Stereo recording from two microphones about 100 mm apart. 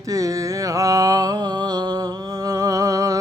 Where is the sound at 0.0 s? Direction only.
35° right (ahead or behind).